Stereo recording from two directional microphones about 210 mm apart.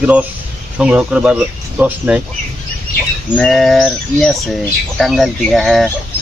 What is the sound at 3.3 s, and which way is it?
Speech, 5° left (ahead or behind).